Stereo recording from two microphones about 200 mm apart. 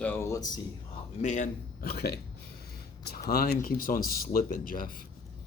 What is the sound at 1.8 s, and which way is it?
Speech, 50° left (ahead or behind).